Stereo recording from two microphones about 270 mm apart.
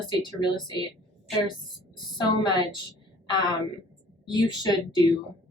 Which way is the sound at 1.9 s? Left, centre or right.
Centre.